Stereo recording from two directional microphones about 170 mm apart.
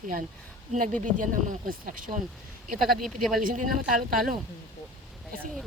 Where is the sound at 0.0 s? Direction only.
55° right (ahead or behind).